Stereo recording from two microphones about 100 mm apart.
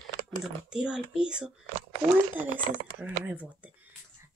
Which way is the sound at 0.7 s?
10° right (ahead or behind).